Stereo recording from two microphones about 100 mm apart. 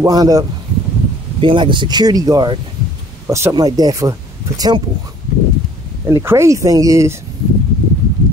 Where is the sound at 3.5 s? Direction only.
40° right (ahead or behind).